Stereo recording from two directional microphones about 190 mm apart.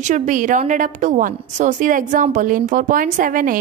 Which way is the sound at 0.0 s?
40° right (ahead or behind).